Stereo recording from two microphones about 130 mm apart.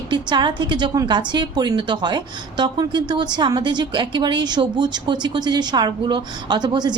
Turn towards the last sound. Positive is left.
turn(degrees=-35)  # may be behind; listen again after turning